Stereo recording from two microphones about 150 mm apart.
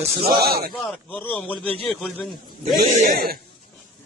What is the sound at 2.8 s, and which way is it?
Speech, 70° right (ahead or behind).